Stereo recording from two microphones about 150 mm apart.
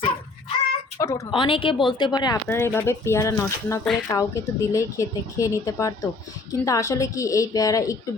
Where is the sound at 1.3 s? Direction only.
35° left (ahead or behind).